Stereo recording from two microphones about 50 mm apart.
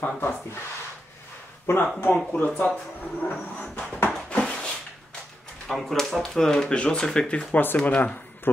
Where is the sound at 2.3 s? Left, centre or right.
Left.